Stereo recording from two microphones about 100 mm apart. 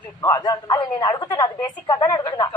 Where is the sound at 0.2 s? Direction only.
45° left (ahead or behind).